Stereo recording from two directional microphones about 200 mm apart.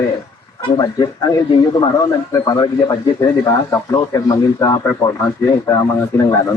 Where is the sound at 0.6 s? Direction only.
20° left (ahead or behind).